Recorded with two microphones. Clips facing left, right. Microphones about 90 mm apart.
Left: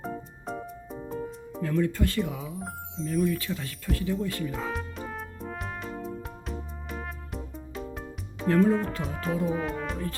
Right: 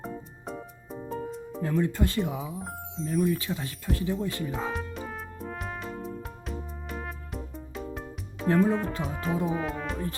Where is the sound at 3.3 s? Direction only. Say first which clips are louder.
Right 1 dB; 25° right (ahead or behind).